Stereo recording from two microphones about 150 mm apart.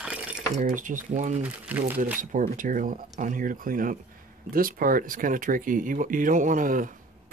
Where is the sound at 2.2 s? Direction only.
65° right (ahead or behind).